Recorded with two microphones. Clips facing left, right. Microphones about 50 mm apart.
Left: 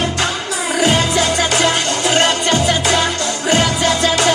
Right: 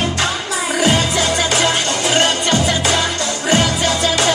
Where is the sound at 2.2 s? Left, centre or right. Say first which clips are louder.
Left 1 dB; left.